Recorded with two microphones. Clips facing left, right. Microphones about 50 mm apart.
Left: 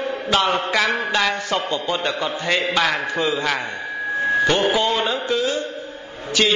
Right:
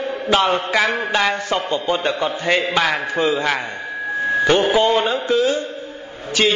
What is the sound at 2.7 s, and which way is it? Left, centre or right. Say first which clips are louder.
Speech: right 1 dB; centre.